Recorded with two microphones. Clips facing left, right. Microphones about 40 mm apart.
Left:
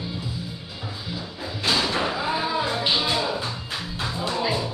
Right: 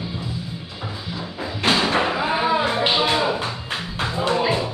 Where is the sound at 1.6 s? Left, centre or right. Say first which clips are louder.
Right 4 dB; right.